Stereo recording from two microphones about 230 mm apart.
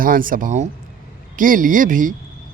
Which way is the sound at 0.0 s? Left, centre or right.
Right.